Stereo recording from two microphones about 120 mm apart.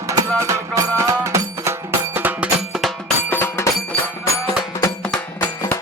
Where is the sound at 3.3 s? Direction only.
15° left (ahead or behind).